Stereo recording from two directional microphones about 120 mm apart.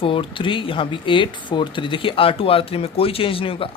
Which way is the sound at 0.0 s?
45° left (ahead or behind).